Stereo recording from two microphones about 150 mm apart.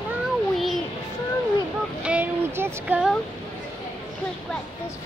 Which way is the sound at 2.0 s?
10° right (ahead or behind).